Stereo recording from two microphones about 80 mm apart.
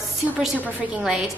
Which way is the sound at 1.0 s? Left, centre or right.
Centre.